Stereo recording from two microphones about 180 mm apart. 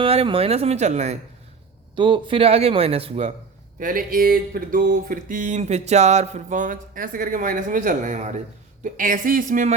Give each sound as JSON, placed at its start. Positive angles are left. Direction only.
{"t": 0.0, "sound": "a man's voice", "side_deg": -30}
{"t": 2.0, "sound": "a man's voice", "side_deg": -25}
{"t": 3.8, "sound": "a sound", "side_deg": -50}